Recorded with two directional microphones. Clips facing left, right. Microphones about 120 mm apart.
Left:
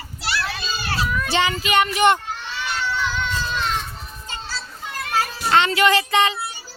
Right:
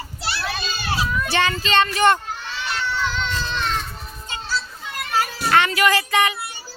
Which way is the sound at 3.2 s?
5° left (ahead or behind).